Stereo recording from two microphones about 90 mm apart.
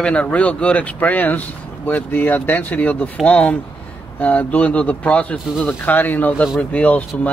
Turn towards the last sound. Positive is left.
turn(degrees=15)  # may be behind; listen again after turning